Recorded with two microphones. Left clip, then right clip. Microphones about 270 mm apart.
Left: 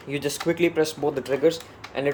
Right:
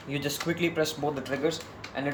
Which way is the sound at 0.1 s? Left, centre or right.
Centre.